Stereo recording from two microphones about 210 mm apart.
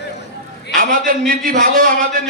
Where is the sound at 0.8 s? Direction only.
40° right (ahead or behind).